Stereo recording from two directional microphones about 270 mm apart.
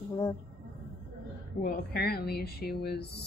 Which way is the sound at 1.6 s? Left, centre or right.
Left.